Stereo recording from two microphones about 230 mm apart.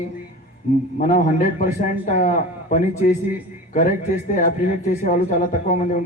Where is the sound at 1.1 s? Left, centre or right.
Left.